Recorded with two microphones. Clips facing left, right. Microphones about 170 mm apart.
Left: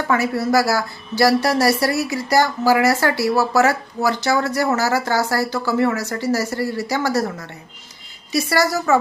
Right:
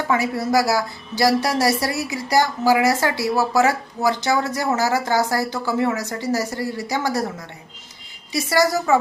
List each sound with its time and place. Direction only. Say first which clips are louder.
0.1 s a woman's voice: left 2 dB; 20° right (ahead or behind)